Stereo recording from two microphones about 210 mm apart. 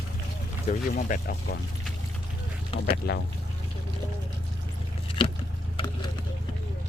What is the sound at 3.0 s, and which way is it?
Speech, 45° left (ahead or behind).